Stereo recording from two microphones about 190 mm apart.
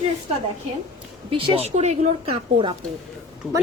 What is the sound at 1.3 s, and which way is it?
A woman's voice, 30° right (ahead or behind).